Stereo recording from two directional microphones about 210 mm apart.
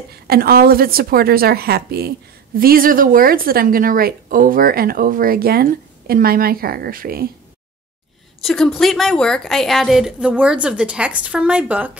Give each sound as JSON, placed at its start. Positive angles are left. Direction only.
{"t": 0.1, "sound": "a woman's voice", "side_deg": -45}
{"t": 8.4, "sound": "a woman's voice", "side_deg": 0}